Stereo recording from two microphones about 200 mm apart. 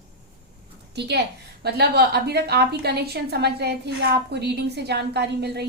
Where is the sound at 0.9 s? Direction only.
55° right (ahead or behind).